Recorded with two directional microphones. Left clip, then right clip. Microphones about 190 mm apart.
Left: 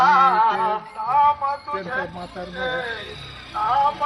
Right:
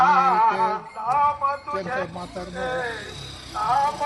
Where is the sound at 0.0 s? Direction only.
Centre (ahead or behind).